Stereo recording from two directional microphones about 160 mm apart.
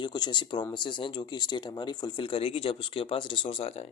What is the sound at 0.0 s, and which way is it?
Speech, 25° left (ahead or behind).